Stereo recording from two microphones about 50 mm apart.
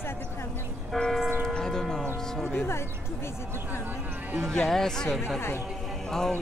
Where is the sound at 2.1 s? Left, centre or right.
Centre.